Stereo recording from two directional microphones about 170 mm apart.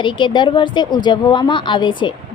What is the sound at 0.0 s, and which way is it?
Speech, 30° left (ahead or behind).